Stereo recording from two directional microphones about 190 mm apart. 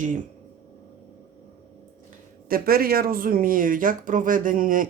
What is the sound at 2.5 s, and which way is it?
Speech, 50° right (ahead or behind).